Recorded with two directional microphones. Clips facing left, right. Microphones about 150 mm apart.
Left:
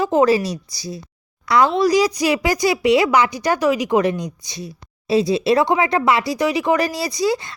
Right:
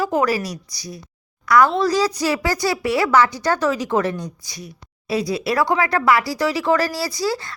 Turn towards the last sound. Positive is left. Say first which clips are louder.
# left 3 dB
turn(degrees=20)  # may be behind; listen again after turning